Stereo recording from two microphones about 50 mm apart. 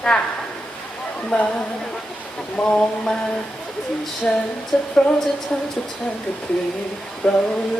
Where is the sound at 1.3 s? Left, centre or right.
Centre.